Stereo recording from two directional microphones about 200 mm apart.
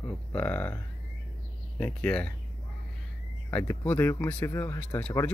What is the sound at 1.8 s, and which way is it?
Speech, 5° left (ahead or behind).